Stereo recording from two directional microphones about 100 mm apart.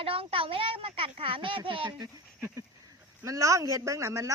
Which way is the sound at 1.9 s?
40° right (ahead or behind).